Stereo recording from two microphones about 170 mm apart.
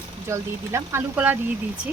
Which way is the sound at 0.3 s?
15° right (ahead or behind).